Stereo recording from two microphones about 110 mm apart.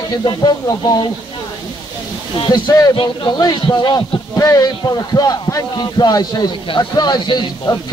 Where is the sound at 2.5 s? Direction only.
35° left (ahead or behind).